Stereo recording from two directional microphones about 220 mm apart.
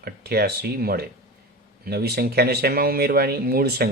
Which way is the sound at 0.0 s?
45° right (ahead or behind).